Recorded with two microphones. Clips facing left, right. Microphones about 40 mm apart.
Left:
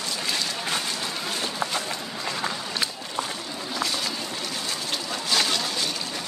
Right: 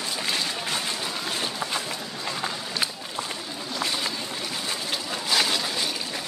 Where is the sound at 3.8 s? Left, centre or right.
Centre.